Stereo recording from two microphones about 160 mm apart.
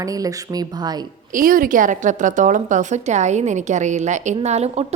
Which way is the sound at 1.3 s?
60° right (ahead or behind).